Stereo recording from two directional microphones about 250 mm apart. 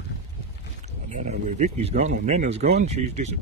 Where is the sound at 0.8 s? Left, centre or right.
Right.